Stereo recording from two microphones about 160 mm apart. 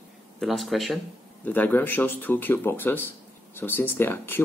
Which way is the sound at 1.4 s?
10° left (ahead or behind).